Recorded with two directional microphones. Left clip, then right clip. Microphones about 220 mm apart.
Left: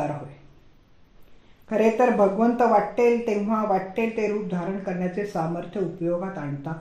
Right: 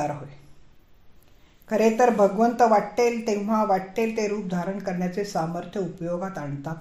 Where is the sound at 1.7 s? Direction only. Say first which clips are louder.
Even; 25° right (ahead or behind).